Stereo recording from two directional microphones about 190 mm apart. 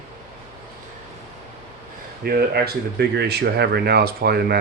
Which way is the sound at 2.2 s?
55° right (ahead or behind).